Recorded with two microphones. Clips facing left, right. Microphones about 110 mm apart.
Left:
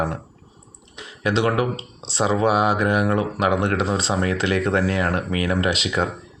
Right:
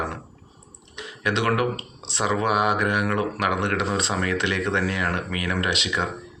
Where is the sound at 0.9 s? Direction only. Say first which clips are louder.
Left 3 dB; 30° left (ahead or behind).